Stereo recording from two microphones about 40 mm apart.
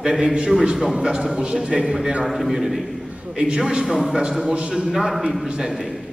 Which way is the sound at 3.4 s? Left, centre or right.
Centre.